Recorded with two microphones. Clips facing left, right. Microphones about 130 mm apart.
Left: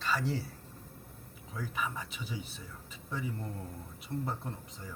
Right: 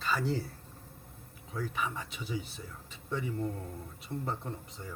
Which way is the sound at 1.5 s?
Centre (ahead or behind).